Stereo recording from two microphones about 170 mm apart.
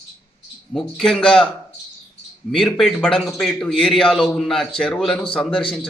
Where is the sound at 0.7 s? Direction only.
Centre (ahead or behind).